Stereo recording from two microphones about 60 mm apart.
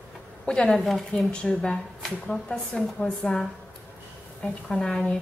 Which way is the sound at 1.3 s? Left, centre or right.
Centre.